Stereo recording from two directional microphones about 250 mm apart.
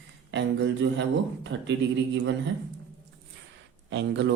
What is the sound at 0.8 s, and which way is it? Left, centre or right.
Speech, right.